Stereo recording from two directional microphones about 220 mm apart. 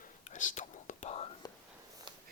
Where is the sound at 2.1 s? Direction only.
20° right (ahead or behind).